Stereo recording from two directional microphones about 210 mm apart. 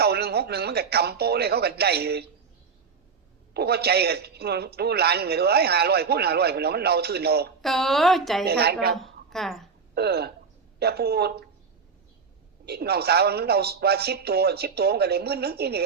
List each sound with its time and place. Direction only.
0.0 s speech: 50° right (ahead or behind)
3.5 s a man's voice: 50° right (ahead or behind)
7.6 s a woman's voice: centre (ahead or behind)
8.4 s a man's voice: 50° right (ahead or behind)
9.0 s a woman's voice: centre (ahead or behind)
9.9 s a man's voice: 50° right (ahead or behind)
12.6 s a man's voice: 50° right (ahead or behind)